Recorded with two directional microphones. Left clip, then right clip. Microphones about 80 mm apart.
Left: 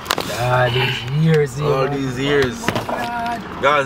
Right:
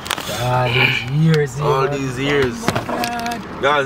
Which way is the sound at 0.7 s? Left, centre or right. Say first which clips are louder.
Right 4 dB; right.